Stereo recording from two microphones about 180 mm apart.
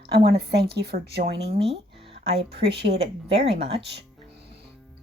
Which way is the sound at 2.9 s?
35° right (ahead or behind).